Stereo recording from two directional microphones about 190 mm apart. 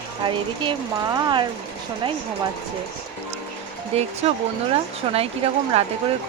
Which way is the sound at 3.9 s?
35° right (ahead or behind).